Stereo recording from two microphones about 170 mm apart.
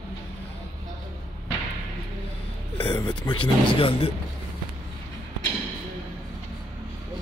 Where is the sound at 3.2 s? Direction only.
30° left (ahead or behind).